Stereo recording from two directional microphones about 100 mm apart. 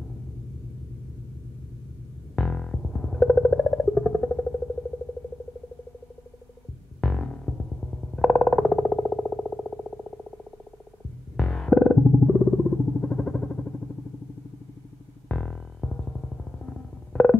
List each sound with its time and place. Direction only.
2.3 s music: 10° left (ahead or behind)
7.0 s music: 10° left (ahead or behind)
15.2 s music: 10° left (ahead or behind)